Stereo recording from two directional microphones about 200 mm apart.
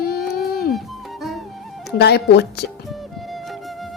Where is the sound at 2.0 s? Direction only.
55° left (ahead or behind).